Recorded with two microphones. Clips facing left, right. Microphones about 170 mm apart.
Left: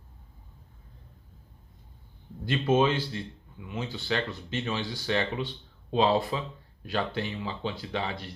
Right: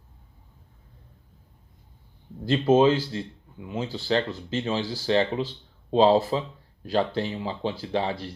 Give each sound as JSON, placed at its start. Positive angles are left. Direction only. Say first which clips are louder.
{"t": 2.5, "sound": "speech", "louder": "right 5 dB", "side_deg": -30}